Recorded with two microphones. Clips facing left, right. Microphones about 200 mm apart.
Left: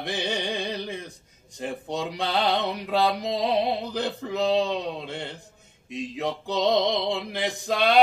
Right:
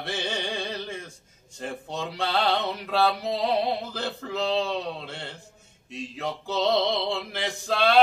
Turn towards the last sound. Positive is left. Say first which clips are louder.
# even
turn(degrees=15)  # may be behind; listen again after turning